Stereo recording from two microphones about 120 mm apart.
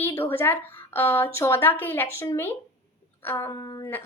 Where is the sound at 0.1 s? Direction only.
20° left (ahead or behind).